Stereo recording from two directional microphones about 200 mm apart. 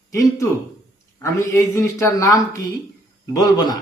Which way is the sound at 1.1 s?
15° left (ahead or behind).